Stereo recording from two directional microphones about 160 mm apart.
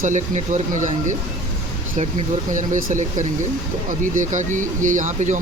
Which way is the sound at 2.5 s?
55° right (ahead or behind).